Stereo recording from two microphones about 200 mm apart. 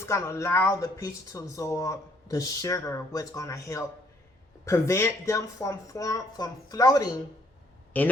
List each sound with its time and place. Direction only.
0.0 s speech: 15° left (ahead or behind)